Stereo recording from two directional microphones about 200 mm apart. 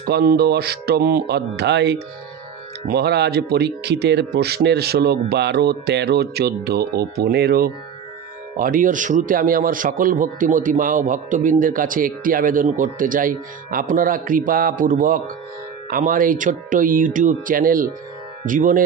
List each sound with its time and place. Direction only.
0.0 s speech: 50° right (ahead or behind)